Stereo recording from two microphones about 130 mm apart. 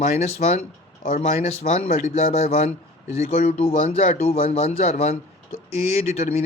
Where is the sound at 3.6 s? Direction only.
50° left (ahead or behind).